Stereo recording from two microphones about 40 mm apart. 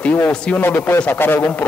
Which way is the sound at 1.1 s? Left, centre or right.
Left.